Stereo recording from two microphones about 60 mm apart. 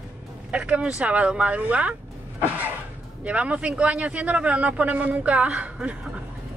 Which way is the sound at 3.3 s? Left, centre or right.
Centre.